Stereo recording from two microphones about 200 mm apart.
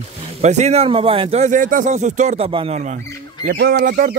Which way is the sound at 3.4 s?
45° right (ahead or behind).